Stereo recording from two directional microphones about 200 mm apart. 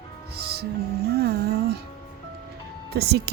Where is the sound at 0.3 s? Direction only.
55° right (ahead or behind).